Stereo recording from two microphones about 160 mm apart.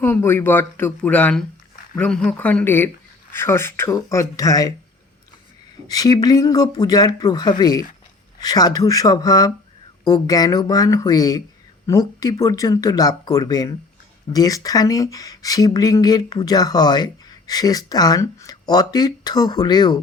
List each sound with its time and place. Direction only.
0.0 s speech: 15° left (ahead or behind)
5.9 s speech: 25° left (ahead or behind)